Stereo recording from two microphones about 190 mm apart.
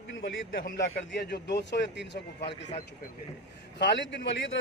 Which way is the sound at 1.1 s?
60° left (ahead or behind).